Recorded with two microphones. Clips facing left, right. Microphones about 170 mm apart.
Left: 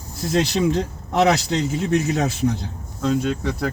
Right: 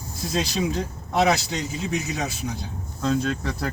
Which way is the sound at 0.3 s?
70° left (ahead or behind).